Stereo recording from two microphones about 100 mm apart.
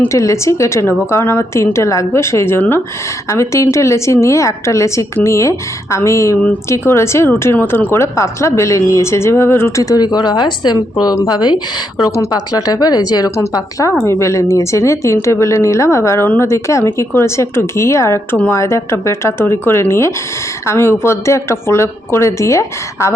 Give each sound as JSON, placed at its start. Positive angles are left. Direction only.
{"t": 0.1, "sound": "a woman's voice", "side_deg": 30}
{"t": 9.9, "sound": "a woman's voice", "side_deg": 45}
{"t": 13.3, "sound": "a woman's voice", "side_deg": 30}